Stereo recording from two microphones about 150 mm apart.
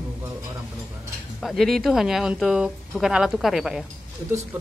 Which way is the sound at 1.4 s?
Centre (ahead or behind).